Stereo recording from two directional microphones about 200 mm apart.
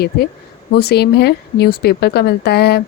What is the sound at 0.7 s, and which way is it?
Speech, 55° left (ahead or behind).